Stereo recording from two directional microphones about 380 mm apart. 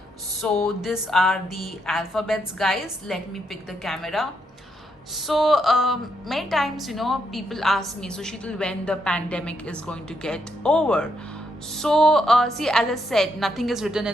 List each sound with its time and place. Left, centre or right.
0.4 s a woman's voice: centre